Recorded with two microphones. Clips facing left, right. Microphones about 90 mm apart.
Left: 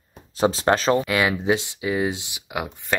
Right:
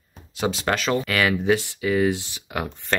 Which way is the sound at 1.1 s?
20° left (ahead or behind).